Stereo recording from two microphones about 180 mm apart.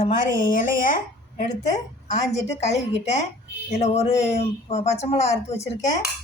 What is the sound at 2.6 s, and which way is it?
A woman's voice, 40° left (ahead or behind).